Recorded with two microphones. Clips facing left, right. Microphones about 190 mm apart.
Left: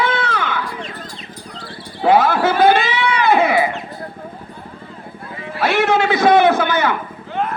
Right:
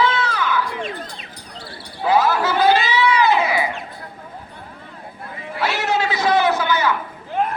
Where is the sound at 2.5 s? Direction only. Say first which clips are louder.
Left 3 dB; 55° left (ahead or behind).